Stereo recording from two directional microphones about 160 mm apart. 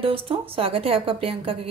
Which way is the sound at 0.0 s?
35° right (ahead or behind).